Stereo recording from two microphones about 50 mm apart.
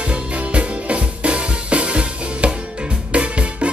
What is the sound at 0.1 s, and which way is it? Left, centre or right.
Music, right.